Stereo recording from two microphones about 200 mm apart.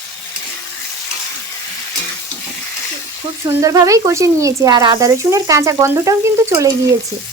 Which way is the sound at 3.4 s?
15° right (ahead or behind).